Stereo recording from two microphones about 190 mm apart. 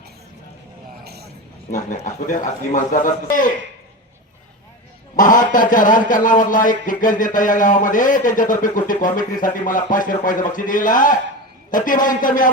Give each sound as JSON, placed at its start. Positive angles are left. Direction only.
{"t": 1.0, "sound": "vehicle", "side_deg": -55}
{"t": 1.7, "sound": "a man's voice", "side_deg": 40}
{"t": 5.1, "sound": "speech", "side_deg": 45}